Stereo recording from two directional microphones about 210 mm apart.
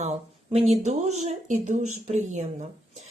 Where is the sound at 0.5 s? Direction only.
30° right (ahead or behind).